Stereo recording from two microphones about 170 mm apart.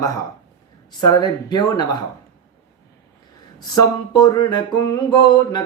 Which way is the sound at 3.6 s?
25° left (ahead or behind).